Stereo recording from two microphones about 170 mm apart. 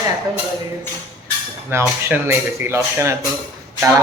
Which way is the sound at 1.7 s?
15° right (ahead or behind).